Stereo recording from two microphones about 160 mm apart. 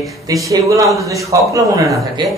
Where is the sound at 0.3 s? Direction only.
20° right (ahead or behind).